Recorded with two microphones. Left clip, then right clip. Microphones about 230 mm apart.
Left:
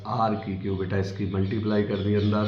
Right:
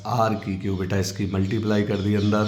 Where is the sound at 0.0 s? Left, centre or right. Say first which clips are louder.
Right 3 dB; right.